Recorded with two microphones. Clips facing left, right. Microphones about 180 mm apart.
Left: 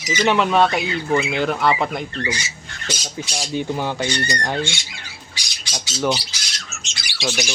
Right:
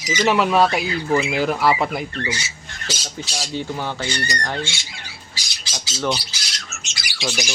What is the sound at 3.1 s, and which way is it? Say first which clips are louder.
Speech: left 3 dB; 15° left (ahead or behind).